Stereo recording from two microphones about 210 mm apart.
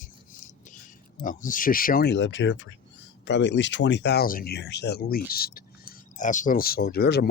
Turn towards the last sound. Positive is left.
turn(degrees=50)  # may be behind; listen again after turning